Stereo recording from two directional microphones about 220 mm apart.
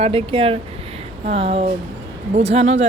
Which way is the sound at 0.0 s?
25° right (ahead or behind).